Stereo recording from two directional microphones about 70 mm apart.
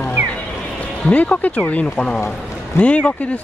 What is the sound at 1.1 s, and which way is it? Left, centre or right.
Speech, left.